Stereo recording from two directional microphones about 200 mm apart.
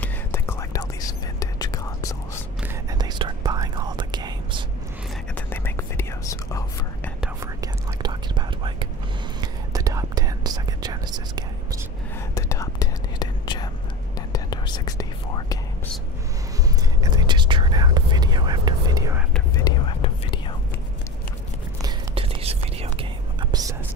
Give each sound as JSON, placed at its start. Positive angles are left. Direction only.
{"t": 0.0, "sound": "whispering", "side_deg": 10}
{"t": 2.7, "sound": "whispering", "side_deg": -20}
{"t": 5.3, "sound": "whispering", "side_deg": 10}
{"t": 7.6, "sound": "speech", "side_deg": -20}
{"t": 9.4, "sound": "whispering", "side_deg": -15}
{"t": 12.4, "sound": "whispering", "side_deg": 15}
{"t": 17.0, "sound": "whispering", "side_deg": -20}
{"t": 19.5, "sound": "whispering", "side_deg": 20}
{"t": 21.8, "sound": "whispering", "side_deg": -25}
{"t": 23.5, "sound": "whispering", "side_deg": -15}